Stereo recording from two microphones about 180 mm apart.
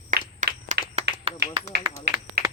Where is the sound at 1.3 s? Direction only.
30° right (ahead or behind).